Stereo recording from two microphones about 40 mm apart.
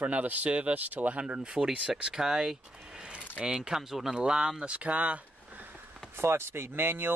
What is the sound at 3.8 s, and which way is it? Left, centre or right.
Speech, centre.